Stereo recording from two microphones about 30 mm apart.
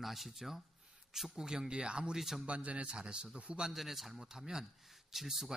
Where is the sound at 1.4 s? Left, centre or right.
Right.